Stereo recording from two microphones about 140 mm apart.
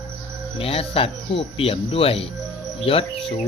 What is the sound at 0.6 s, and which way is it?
Speech, 45° left (ahead or behind).